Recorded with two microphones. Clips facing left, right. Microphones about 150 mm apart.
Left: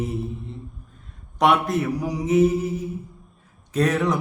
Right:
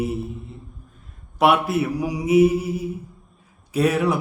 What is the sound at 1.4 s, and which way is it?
Mantra, 5° right (ahead or behind).